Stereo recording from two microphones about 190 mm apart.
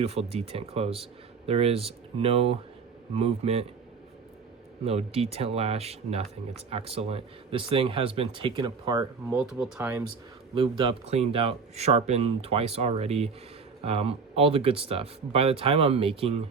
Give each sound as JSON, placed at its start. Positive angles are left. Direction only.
{"t": 0.0, "sound": "speech", "side_deg": -35}
{"t": 4.9, "sound": "speech", "side_deg": -30}
{"t": 9.3, "sound": "speech", "side_deg": -5}
{"t": 10.5, "sound": "speech", "side_deg": -25}